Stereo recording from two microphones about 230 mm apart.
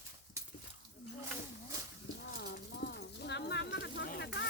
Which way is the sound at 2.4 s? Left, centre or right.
Left.